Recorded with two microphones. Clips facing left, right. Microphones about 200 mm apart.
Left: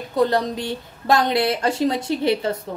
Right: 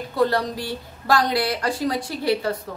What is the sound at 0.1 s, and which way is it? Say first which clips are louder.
A woman's voice: left 2 dB; 20° left (ahead or behind).